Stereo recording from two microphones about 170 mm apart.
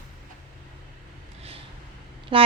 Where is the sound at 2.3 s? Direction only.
30° right (ahead or behind).